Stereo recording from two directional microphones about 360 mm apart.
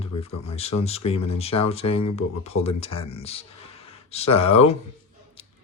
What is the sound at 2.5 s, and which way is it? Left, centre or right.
Speech, left.